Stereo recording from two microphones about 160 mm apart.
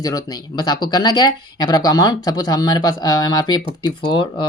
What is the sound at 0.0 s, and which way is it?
Speech, 25° left (ahead or behind).